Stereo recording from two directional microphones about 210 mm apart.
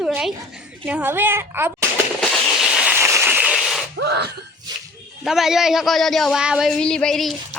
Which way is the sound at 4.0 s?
50° right (ahead or behind).